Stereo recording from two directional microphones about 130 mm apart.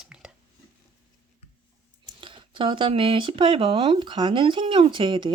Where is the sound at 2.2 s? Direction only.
40° right (ahead or behind).